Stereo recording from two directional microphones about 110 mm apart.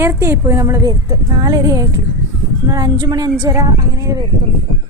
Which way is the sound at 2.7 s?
45° right (ahead or behind).